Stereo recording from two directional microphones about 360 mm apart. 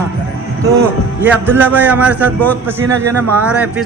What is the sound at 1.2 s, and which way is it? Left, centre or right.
A man's voice, centre.